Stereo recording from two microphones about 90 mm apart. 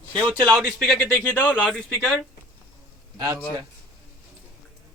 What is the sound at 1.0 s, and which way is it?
Speech, 20° left (ahead or behind).